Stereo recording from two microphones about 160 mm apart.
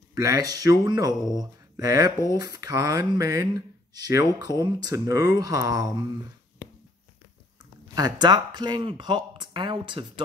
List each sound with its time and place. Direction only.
0.1 s speech: 20° right (ahead or behind)
7.9 s speech: 25° right (ahead or behind)